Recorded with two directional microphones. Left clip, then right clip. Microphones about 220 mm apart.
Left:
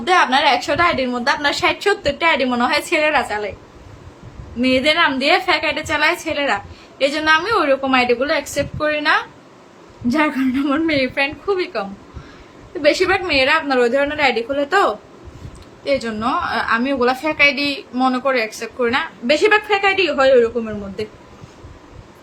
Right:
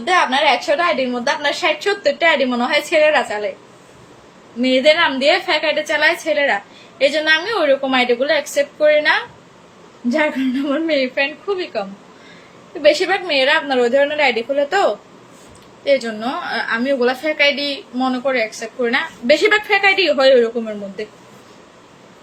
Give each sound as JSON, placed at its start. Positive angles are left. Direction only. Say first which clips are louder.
{"t": 0.0, "sound": "a woman's voice", "louder": "left 1 dB", "side_deg": 15}
{"t": 4.6, "sound": "a woman's voice", "louder": "right 2 dB", "side_deg": 15}